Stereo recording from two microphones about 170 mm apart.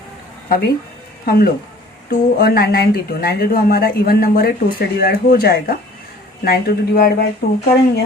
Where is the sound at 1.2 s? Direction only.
65° left (ahead or behind).